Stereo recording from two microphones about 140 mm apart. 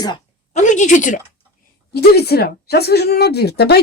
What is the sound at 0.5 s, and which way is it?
Speech, 60° left (ahead or behind).